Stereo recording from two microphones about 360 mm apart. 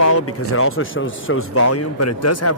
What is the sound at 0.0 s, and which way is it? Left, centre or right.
Speech, left.